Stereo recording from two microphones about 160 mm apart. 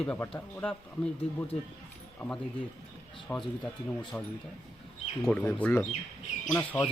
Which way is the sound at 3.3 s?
10° left (ahead or behind).